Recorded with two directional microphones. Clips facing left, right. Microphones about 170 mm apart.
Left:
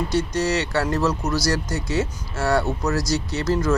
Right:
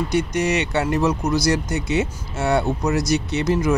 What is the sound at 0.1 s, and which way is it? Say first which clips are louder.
Speech: right 2 dB; 20° right (ahead or behind).